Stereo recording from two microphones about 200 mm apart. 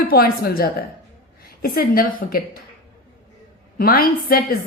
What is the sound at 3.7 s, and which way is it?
Speech, 45° left (ahead or behind).